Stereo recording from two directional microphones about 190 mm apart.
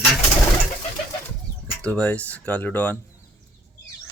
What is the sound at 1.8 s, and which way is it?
Speech, 5° left (ahead or behind).